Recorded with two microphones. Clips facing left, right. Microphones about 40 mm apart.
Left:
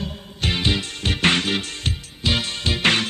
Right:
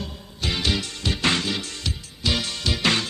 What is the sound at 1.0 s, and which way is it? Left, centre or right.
Music, left.